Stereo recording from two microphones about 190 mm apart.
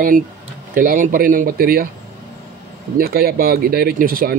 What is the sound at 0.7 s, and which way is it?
Speech, 45° right (ahead or behind).